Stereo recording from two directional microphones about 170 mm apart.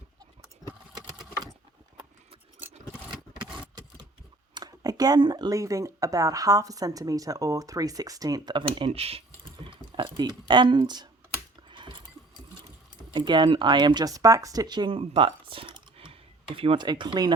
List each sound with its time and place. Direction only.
4.5 s speech: 25° right (ahead or behind)
11.7 s a sound: 30° right (ahead or behind)
13.1 s speech: 30° right (ahead or behind)